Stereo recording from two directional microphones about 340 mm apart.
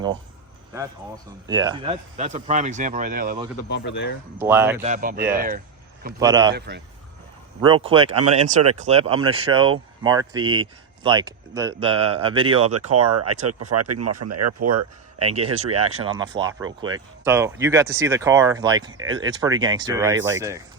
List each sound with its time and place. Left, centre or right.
1.5 s speech: centre
3.7 s speech: left
4.4 s speech: centre
4.8 s speech: right
6.1 s speech: centre
6.5 s speech: right
7.6 s speech: centre
12.7 s speech: right
15.3 s speech: centre